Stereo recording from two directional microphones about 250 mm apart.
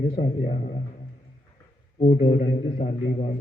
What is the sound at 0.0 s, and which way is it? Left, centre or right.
Speech, centre.